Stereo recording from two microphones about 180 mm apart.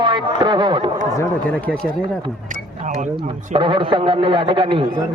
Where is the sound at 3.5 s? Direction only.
30° right (ahead or behind).